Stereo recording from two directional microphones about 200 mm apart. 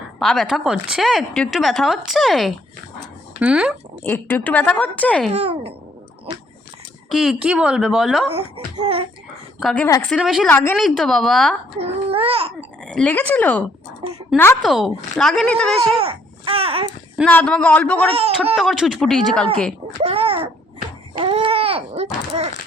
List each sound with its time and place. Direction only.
0.2 s a woman's voice: centre (ahead or behind)
4.0 s a woman's voice: 10° left (ahead or behind)
5.3 s a sound: 30° right (ahead or behind)
7.1 s a woman's voice: centre (ahead or behind)
8.3 s a sound: 30° right (ahead or behind)
9.6 s a woman's voice: centre (ahead or behind)
10.5 s a woman's voice: 10° left (ahead or behind)
11.8 s speech: 30° right (ahead or behind)
12.9 s a woman's voice: 5° left (ahead or behind)
15.9 s speech: 30° right (ahead or behind)
17.2 s a woman's voice: 5° left (ahead or behind)
20.0 s a sound: 30° right (ahead or behind)
21.2 s speech: 25° right (ahead or behind)